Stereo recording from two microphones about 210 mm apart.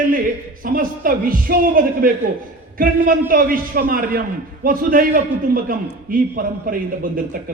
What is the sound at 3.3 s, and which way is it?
A man's voice, 45° right (ahead or behind).